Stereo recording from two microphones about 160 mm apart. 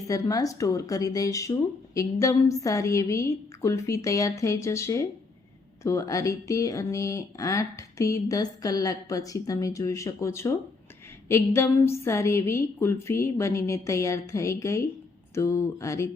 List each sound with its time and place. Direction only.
0.1 s a woman's voice: 20° left (ahead or behind)